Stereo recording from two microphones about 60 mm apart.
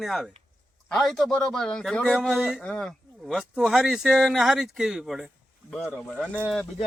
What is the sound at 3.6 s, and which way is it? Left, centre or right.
Speech, centre.